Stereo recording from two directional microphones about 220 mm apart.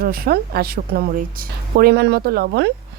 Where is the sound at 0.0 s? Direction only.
45° right (ahead or behind).